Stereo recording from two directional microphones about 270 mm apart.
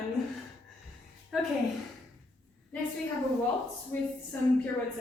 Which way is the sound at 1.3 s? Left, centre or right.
Centre.